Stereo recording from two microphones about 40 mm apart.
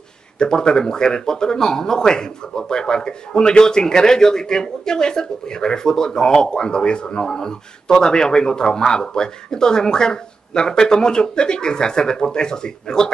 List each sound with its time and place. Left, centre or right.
0.4 s speech: centre